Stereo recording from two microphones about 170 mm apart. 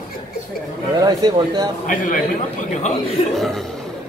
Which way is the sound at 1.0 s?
25° right (ahead or behind).